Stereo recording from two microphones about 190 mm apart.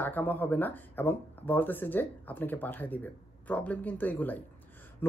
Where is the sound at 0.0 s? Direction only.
10° left (ahead or behind).